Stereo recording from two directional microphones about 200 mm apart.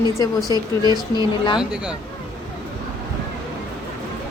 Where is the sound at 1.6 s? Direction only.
5° right (ahead or behind).